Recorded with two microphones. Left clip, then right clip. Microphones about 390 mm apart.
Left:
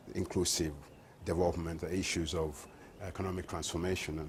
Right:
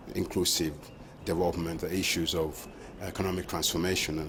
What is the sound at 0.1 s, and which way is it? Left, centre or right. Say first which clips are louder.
Speech: right 5 dB; left.